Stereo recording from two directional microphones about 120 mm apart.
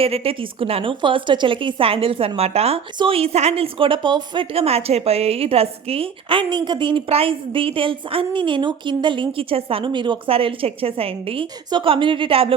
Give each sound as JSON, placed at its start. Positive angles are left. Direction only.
{"t": 0.0, "sound": "a woman's voice", "side_deg": -55}